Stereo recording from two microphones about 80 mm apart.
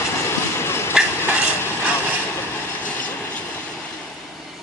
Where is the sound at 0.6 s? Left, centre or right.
Left.